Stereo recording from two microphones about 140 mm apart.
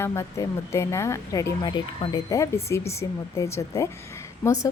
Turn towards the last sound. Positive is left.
turn(degrees=20)  # may be behind; listen again after turning